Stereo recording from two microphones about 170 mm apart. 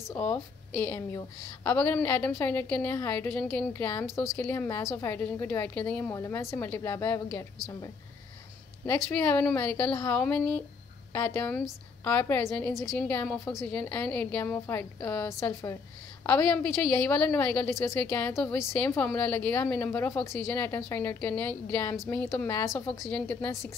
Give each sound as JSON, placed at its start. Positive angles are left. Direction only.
{"t": 0.1, "sound": "speech", "side_deg": 10}
{"t": 8.8, "sound": "speech", "side_deg": 10}
{"t": 11.1, "sound": "speech", "side_deg": 20}
{"t": 11.4, "sound": "a woman's voice", "side_deg": 5}
{"t": 18.3, "sound": "a woman's voice", "side_deg": 5}
{"t": 18.6, "sound": "speech", "side_deg": 15}